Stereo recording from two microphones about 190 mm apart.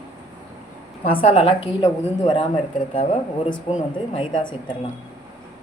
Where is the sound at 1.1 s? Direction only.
30° left (ahead or behind).